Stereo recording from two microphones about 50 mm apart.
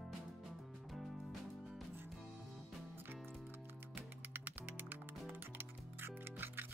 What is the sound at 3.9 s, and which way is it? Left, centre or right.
Music, right.